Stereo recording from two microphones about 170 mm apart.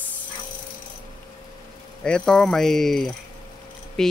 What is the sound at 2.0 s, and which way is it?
Speech, 5° left (ahead or behind).